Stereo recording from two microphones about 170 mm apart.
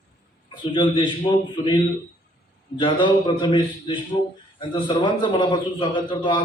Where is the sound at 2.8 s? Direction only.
30° left (ahead or behind).